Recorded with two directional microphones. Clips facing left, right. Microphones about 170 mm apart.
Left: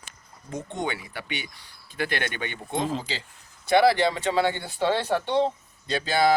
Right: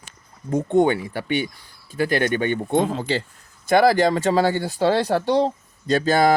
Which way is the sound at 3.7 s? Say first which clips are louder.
Right 4 dB; 45° right (ahead or behind).